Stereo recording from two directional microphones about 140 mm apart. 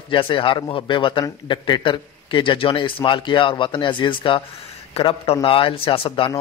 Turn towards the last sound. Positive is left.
turn(degrees=40)  # may be behind; listen again after turning